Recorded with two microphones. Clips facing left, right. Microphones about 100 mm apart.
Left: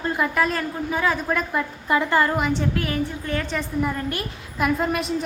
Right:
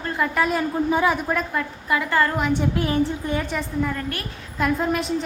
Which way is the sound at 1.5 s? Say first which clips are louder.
Left 2 dB; 25° left (ahead or behind).